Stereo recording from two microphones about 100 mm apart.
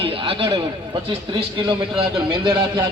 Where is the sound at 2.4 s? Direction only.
55° right (ahead or behind).